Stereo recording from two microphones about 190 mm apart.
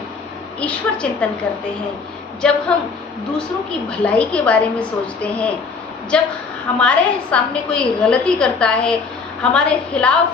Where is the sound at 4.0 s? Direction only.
5° left (ahead or behind).